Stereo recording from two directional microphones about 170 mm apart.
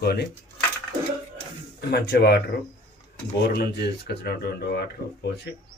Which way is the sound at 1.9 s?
70° left (ahead or behind).